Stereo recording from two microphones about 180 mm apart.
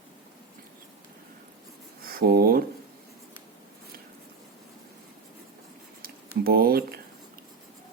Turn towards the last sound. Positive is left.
turn(degrees=-55)  # may be behind; listen again after turning